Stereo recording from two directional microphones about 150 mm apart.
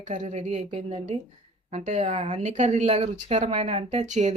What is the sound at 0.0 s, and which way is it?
A woman's voice, 55° right (ahead or behind).